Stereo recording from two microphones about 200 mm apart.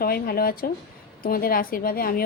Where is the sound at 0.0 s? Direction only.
50° left (ahead or behind).